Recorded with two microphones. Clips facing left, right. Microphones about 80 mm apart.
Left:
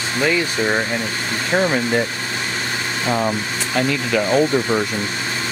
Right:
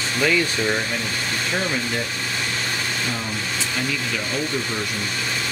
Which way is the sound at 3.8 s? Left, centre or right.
Left.